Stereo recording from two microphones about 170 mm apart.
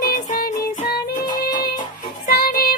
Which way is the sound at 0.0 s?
60° left (ahead or behind).